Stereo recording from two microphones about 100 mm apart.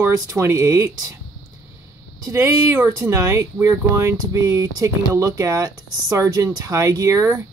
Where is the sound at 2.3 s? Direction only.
25° right (ahead or behind).